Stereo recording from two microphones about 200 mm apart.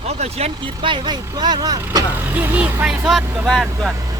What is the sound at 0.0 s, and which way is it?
Speech, 30° right (ahead or behind).